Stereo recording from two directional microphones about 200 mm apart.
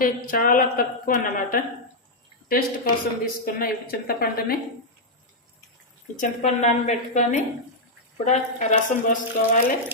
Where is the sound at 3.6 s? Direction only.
50° left (ahead or behind).